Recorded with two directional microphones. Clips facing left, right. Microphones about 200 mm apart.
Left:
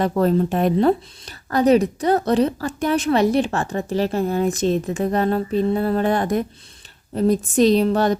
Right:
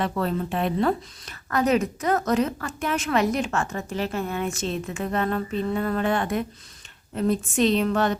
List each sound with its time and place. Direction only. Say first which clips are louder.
0.0 s speech: left 8 dB; 40° left (ahead or behind)